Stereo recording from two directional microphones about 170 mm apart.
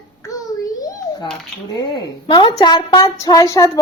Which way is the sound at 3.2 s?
20° left (ahead or behind).